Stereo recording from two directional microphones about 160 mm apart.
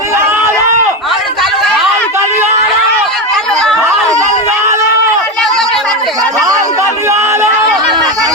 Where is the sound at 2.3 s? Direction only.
45° right (ahead or behind).